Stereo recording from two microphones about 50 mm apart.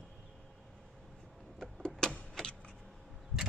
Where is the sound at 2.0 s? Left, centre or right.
Centre.